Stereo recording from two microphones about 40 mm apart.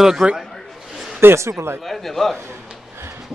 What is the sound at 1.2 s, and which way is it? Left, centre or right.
Speech, right.